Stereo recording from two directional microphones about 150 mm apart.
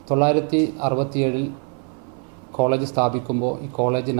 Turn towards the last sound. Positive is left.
turn(degrees=-15)  # may be behind; listen again after turning